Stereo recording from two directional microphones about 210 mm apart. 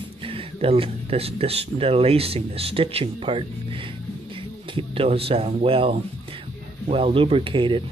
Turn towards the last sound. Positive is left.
turn(degrees=-25)  # may be behind; listen again after turning